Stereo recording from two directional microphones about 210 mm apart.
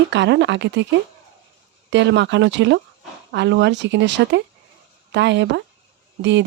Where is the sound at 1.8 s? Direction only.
60° right (ahead or behind).